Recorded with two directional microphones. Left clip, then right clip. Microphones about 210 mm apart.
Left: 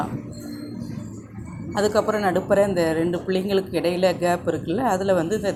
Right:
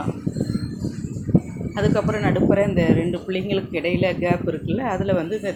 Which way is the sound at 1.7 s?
20° left (ahead or behind).